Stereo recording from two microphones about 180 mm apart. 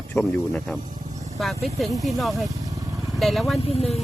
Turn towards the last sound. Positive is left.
turn(degrees=35)  # may be behind; listen again after turning